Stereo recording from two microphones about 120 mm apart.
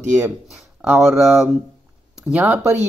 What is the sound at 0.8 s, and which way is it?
Speech, 5° right (ahead or behind).